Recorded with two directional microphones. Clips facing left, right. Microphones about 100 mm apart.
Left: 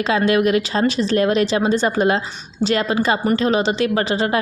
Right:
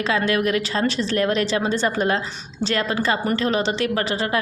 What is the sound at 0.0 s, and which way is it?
A woman's voice, 20° left (ahead or behind).